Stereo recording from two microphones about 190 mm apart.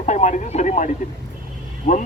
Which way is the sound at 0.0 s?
35° left (ahead or behind).